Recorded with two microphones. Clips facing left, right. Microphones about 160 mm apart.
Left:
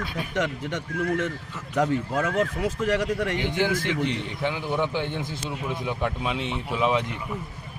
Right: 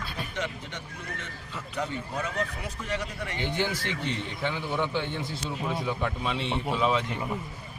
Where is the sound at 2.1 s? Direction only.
90° left.